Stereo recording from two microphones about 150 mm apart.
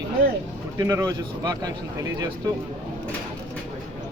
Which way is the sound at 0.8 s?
20° right (ahead or behind).